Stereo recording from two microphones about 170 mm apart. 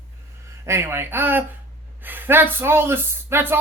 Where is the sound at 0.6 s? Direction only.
15° right (ahead or behind).